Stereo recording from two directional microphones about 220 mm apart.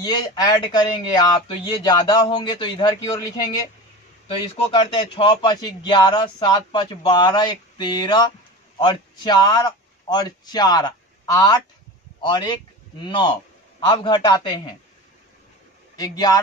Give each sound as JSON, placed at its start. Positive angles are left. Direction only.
{"t": 0.0, "sound": "speech", "side_deg": 20}
{"t": 4.7, "sound": "a man's voice", "side_deg": 20}
{"t": 16.0, "sound": "a man's voice", "side_deg": 15}